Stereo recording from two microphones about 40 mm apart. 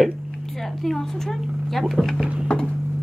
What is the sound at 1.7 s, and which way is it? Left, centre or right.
Speech, centre.